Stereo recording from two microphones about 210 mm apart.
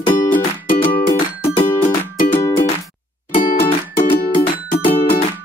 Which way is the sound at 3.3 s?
40° left (ahead or behind).